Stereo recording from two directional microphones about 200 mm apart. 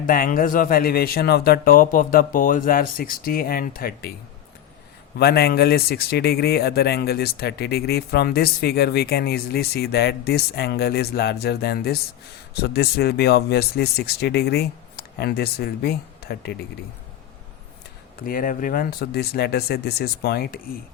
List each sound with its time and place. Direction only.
0.0 s a man's voice: 45° left (ahead or behind)
5.1 s a man's voice: 50° left (ahead or behind)
18.2 s a man's voice: 45° left (ahead or behind)